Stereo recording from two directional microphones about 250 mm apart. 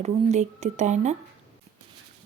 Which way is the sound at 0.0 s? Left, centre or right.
Right.